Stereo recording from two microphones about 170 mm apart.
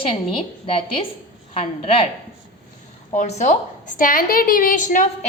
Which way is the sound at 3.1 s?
45° left (ahead or behind).